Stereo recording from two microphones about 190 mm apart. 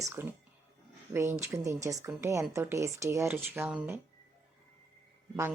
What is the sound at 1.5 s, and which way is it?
Speech, 15° right (ahead or behind).